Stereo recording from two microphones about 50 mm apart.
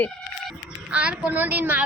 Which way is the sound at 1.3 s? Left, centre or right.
Right.